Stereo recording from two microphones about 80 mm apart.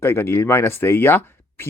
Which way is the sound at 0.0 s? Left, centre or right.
Left.